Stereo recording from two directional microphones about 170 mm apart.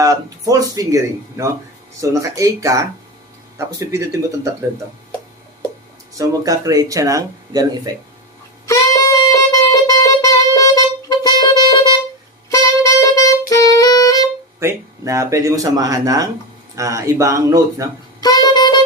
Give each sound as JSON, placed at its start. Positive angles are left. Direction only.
{"t": 0.0, "sound": "speech", "side_deg": -20}
{"t": 6.1, "sound": "speech", "side_deg": -20}
{"t": 8.6, "sound": "saxophone", "side_deg": 20}
{"t": 13.5, "sound": "music", "side_deg": 20}
{"t": 14.6, "sound": "speech", "side_deg": -15}
{"t": 18.2, "sound": "saxophone", "side_deg": 25}